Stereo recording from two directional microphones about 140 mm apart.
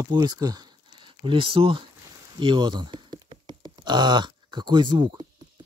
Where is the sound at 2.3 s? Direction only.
35° right (ahead or behind).